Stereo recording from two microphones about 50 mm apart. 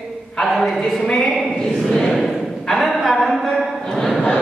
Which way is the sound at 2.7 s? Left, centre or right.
Centre.